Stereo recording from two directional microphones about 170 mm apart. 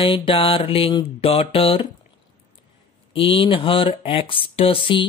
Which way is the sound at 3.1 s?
30° left (ahead or behind).